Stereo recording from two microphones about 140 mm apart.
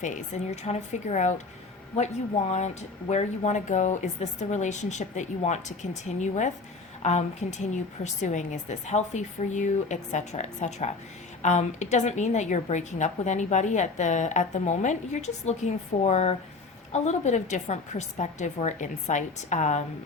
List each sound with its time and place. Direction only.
0.5 s a woman's voice: 50° left (ahead or behind)
3.1 s a woman's voice: 55° left (ahead or behind)